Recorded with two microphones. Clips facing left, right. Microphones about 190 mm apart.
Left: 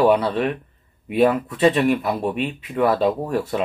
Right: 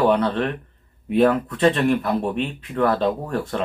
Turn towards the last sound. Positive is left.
turn(degrees=10)  # may be behind; listen again after turning